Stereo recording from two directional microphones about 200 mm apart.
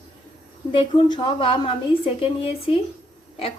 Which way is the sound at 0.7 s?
25° left (ahead or behind).